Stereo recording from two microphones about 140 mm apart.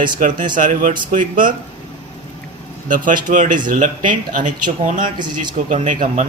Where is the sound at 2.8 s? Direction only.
70° right (ahead or behind).